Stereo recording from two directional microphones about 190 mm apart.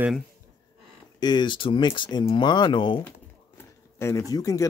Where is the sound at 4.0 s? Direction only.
15° left (ahead or behind).